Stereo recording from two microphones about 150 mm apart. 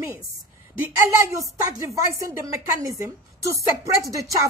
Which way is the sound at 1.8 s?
20° right (ahead or behind).